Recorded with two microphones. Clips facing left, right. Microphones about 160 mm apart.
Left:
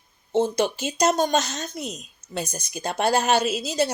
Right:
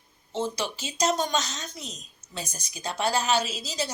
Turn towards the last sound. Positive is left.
turn(degrees=60)  # may be behind; listen again after turning